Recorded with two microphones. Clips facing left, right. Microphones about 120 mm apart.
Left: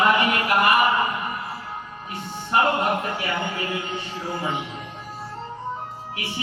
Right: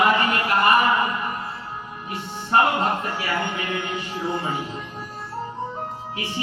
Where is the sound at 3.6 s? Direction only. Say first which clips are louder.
Right 1 dB; 30° left (ahead or behind).